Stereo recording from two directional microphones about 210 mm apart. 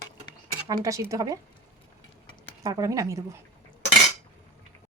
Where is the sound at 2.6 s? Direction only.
15° right (ahead or behind).